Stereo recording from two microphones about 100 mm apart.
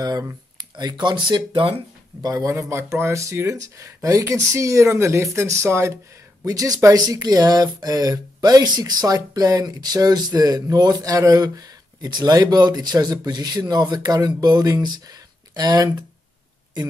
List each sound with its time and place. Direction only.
0.0 s speech: 40° right (ahead or behind); by 1.8 s 60° right (ahead or behind)
2.2 s speech: 35° right (ahead or behind)